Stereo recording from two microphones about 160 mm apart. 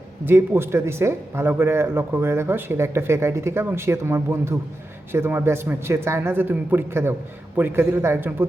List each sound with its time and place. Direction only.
0.3 s speech: 15° right (ahead or behind)